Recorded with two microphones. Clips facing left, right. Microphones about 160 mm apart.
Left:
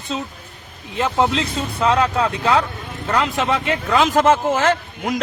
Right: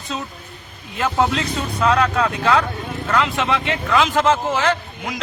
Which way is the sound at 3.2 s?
40° left (ahead or behind).